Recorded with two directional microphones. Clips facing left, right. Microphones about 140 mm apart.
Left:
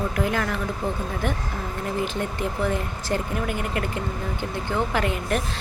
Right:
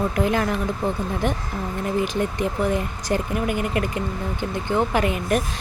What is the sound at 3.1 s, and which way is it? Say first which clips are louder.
Speech: right 3 dB; 15° right (ahead or behind).